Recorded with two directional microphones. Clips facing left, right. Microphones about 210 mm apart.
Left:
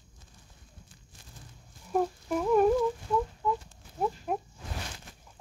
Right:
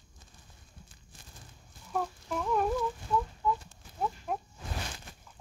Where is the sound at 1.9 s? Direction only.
15° left (ahead or behind).